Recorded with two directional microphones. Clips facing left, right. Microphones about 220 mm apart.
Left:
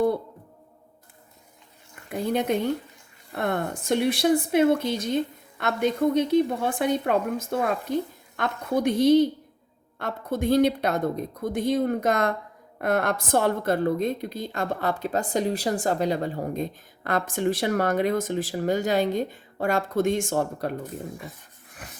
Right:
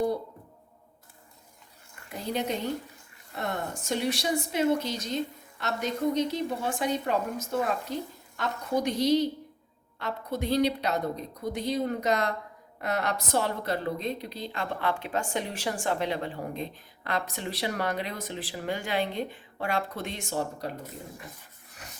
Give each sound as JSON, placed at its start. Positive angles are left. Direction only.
{"t": 2.0, "sound": "a woman's voice", "side_deg": 55}